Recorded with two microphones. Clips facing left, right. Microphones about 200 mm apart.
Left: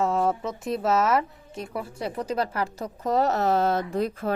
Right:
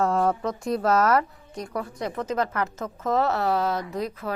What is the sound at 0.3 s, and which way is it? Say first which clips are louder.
A woman's voice: right 2 dB; centre (ahead or behind).